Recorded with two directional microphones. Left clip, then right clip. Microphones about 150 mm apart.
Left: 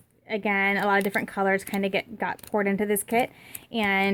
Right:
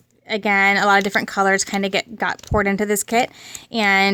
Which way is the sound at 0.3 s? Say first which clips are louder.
Right 8 dB; 30° right (ahead or behind).